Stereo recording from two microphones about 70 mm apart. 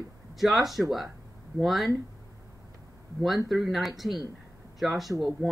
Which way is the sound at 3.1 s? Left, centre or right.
Centre.